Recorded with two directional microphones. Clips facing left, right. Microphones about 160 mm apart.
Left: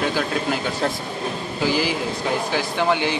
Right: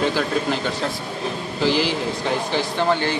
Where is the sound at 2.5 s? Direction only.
10° left (ahead or behind).